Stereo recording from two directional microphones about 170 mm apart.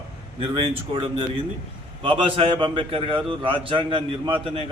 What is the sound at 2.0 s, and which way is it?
A man's voice, 30° right (ahead or behind).